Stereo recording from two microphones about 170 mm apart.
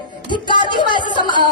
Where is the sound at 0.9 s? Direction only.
25° left (ahead or behind).